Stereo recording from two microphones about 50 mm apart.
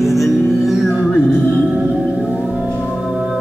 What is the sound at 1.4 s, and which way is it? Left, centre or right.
Music, left.